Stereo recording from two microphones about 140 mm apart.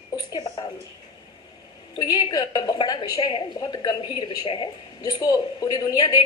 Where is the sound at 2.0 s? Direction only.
30° left (ahead or behind).